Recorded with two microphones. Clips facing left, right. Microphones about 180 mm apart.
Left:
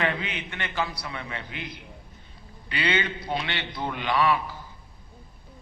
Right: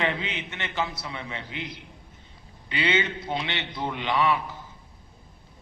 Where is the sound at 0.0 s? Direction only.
20° right (ahead or behind).